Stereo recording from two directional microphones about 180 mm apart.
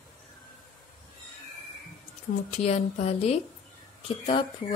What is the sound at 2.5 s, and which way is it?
A woman's voice, 40° left (ahead or behind).